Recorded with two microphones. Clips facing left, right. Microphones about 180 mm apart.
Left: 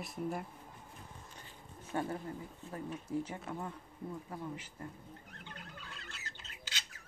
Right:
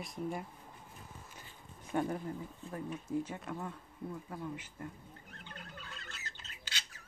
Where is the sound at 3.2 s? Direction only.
10° left (ahead or behind).